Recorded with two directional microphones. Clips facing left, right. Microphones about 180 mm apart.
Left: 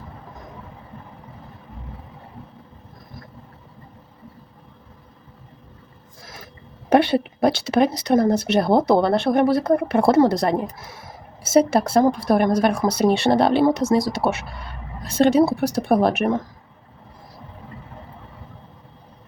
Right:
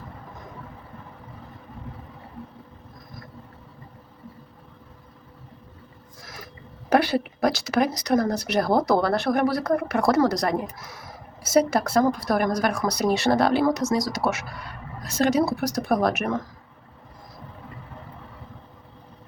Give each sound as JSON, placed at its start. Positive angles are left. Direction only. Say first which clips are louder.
{"t": 6.9, "sound": "speech", "louder": "left 4 dB", "side_deg": 25}